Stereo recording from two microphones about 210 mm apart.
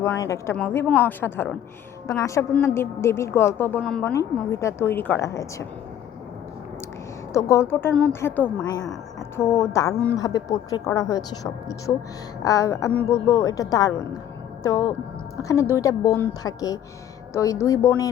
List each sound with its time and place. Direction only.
0.0 s a woman's voice: 15° left (ahead or behind)
7.3 s a woman's voice: 15° left (ahead or behind)